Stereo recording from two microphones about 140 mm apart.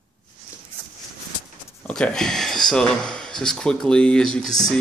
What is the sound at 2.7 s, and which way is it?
Speech, 5° left (ahead or behind).